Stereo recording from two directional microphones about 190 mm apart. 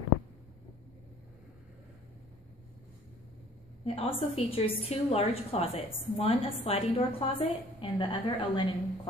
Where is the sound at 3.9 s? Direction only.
30° left (ahead or behind).